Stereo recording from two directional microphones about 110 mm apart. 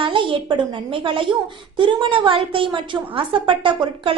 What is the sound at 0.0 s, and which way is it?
A woman's voice, 50° right (ahead or behind).